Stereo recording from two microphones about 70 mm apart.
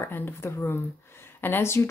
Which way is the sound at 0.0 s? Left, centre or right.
Left.